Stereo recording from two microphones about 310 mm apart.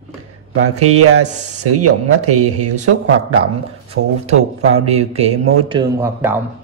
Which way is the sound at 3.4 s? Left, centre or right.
Centre.